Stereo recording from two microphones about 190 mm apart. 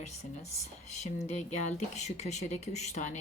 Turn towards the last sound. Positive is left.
turn(degrees=35)  # may be behind; listen again after turning